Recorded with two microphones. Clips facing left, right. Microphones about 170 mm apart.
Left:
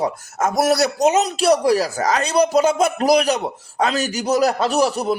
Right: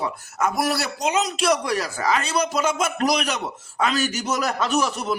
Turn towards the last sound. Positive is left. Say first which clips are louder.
# left 5 dB
turn(degrees=35)  # may be behind; listen again after turning